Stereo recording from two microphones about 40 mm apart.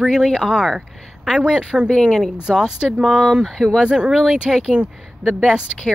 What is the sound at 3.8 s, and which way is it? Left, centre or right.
Speech, right.